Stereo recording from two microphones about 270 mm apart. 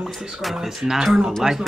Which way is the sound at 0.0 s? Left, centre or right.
Centre.